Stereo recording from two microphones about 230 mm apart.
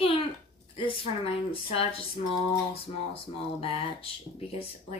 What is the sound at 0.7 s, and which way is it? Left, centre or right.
Speech, left.